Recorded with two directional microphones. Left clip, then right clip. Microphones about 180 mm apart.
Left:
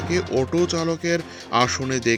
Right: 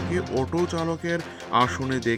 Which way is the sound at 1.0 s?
50° left (ahead or behind).